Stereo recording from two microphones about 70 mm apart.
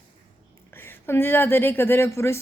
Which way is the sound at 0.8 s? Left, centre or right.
Left.